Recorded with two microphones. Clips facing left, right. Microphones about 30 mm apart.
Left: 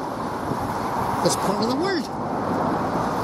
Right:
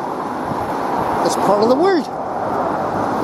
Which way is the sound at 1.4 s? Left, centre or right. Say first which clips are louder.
Right 9 dB; centre.